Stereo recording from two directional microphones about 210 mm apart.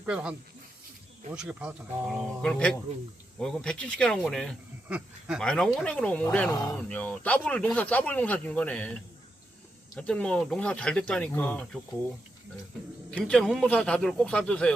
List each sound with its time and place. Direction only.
0.0 s speech: 5° right (ahead or behind)
6.5 s speech: 15° left (ahead or behind)
6.7 s speech: 5° left (ahead or behind)
13.1 s speech: 5° left (ahead or behind)